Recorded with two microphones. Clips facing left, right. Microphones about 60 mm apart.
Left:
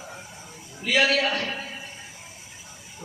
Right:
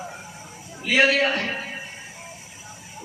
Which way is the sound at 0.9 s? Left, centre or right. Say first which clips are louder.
Right 3 dB; right.